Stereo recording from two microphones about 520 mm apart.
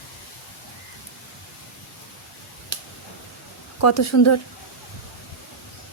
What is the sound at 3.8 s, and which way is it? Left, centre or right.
Speech, left.